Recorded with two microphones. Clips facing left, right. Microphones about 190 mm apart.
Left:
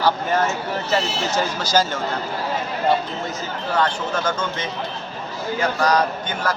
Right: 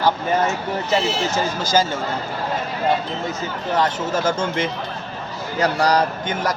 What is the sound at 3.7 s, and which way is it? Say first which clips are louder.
Speech: right 1 dB; 25° right (ahead or behind).